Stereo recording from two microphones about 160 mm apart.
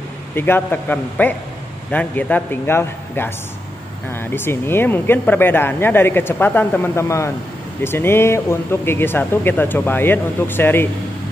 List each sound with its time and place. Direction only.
0.3 s speech: 15° left (ahead or behind)